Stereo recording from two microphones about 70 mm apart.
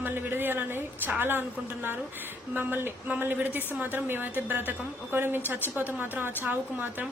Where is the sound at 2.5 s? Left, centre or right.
Right.